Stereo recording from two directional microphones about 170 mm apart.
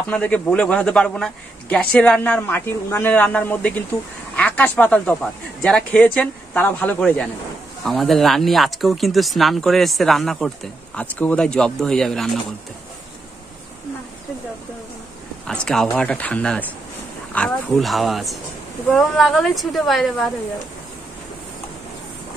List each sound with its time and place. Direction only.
0.1 s a man's voice: 10° left (ahead or behind)
15.4 s a man's voice: 5° left (ahead or behind)